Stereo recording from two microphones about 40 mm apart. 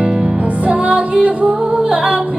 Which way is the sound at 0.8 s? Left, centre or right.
Right.